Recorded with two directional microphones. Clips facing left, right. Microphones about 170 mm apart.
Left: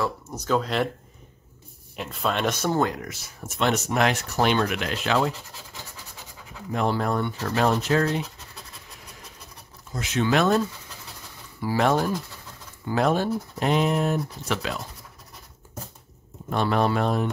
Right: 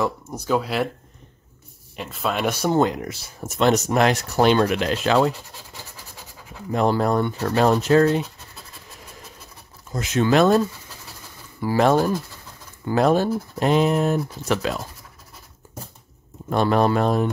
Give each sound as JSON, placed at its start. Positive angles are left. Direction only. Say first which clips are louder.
{"t": 0.0, "sound": "speech", "louder": "right 3 dB", "side_deg": -10}
{"t": 2.0, "sound": "speech", "louder": "right 1 dB", "side_deg": 0}
{"t": 2.7, "sound": "speech", "louder": "right 4 dB", "side_deg": -20}
{"t": 6.7, "sound": "speech", "louder": "right 5 dB", "side_deg": -35}
{"t": 9.9, "sound": "speech", "louder": "right 5 dB", "side_deg": -45}
{"t": 11.6, "sound": "speech", "louder": "right 4 dB", "side_deg": -45}
{"t": 16.4, "sound": "speech", "louder": "right 4 dB", "side_deg": -40}